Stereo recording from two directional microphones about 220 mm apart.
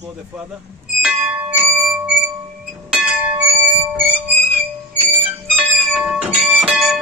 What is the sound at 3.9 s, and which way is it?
Music, 5° right (ahead or behind).